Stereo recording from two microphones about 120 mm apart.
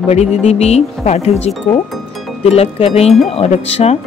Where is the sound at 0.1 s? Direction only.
65° left (ahead or behind).